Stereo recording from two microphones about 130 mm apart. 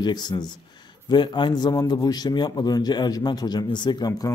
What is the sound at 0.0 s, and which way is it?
A man's voice, 35° left (ahead or behind).